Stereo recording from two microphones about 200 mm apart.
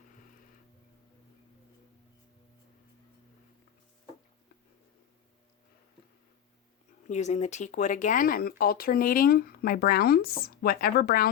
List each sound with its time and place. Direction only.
7.1 s speech: 35° left (ahead or behind)